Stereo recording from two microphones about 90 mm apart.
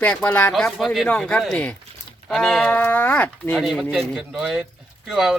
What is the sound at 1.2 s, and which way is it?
Speech, 5° left (ahead or behind).